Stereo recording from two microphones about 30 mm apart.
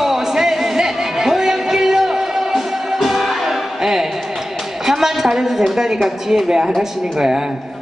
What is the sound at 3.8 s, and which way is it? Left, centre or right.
Music, centre.